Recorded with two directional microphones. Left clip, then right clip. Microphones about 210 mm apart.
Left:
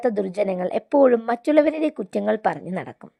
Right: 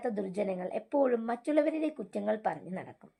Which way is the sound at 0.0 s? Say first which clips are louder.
Left 11 dB; 45° left (ahead or behind).